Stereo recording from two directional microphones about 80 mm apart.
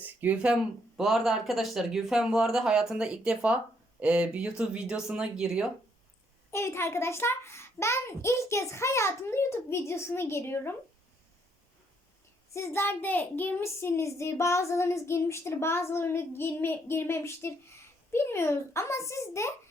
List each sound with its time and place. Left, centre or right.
0.0 s a sound: right
0.4 s speech: centre
6.5 s a child's voice: left
12.5 s a child's voice: left